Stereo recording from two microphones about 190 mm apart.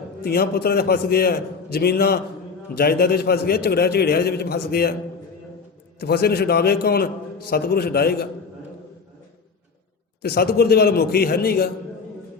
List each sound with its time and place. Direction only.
0.2 s a man's voice: 55° left (ahead or behind)
6.0 s a man's voice: 55° left (ahead or behind)
10.2 s a man's voice: 55° left (ahead or behind)